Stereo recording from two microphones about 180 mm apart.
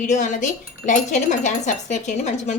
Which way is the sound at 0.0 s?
40° left (ahead or behind).